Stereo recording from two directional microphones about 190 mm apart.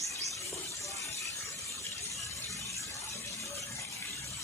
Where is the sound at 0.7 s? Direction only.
15° left (ahead or behind).